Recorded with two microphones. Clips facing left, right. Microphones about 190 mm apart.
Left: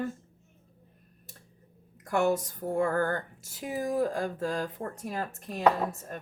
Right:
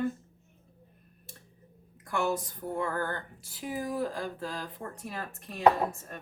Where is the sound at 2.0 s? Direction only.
45° left (ahead or behind).